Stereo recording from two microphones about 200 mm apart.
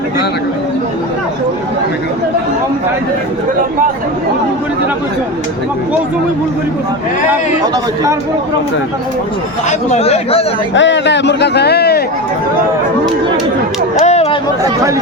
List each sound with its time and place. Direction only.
9.6 s speech: 35° left (ahead or behind)
10.8 s a man's voice: 65° left (ahead or behind)
14.0 s chatter: 35° left (ahead or behind)
14.6 s speech: 15° right (ahead or behind)